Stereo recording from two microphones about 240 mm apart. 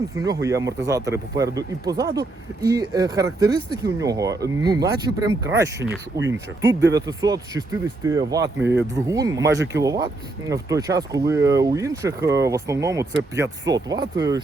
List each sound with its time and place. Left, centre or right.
0.2 s speech: centre
6.3 s speech: right
6.7 s speech: centre